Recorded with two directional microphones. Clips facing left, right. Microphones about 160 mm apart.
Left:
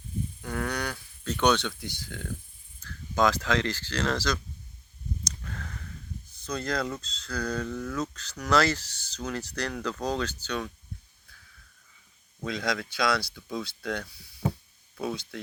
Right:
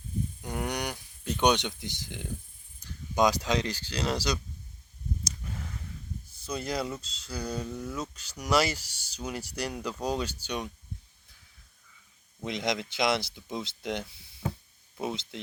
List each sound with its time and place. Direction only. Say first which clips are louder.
0.4 s speech: left 2 dB; 20° right (ahead or behind)
6.4 s speech: left 2 dB; 10° right (ahead or behind)
12.5 s speech: even; 20° right (ahead or behind)